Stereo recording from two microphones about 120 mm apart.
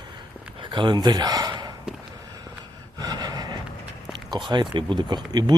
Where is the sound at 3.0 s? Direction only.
35° right (ahead or behind).